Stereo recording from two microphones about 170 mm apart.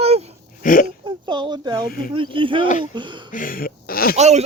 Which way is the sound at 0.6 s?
55° left (ahead or behind).